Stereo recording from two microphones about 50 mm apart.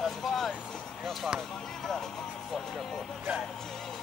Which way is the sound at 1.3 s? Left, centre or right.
Centre.